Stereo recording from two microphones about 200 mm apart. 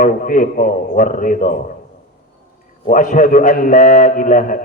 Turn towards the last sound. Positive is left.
turn(degrees=40)  # may be behind; listen again after turning